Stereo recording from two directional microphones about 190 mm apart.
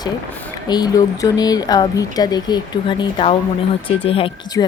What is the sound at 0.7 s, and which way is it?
A woman's voice, 20° left (ahead or behind).